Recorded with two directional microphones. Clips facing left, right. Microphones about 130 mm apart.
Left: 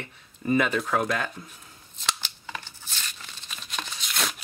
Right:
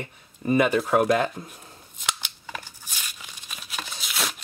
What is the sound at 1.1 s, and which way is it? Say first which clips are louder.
Speech: right 7 dB; 30° right (ahead or behind).